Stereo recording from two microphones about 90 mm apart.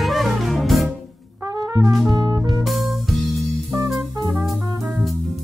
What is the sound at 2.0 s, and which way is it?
Music, 40° right (ahead or behind).